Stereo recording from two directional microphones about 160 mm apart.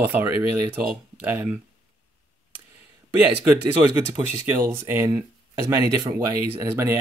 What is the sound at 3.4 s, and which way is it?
Speech, 15° right (ahead or behind).